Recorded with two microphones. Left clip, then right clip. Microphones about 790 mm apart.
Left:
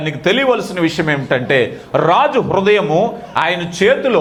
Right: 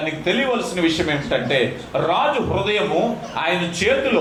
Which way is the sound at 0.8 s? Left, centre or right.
Left.